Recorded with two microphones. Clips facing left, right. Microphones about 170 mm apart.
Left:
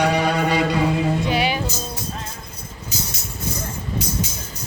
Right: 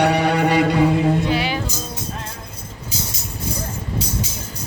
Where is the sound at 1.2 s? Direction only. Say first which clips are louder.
Even; 15° left (ahead or behind).